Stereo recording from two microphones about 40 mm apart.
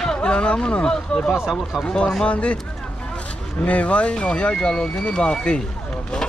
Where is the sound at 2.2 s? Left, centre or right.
Left.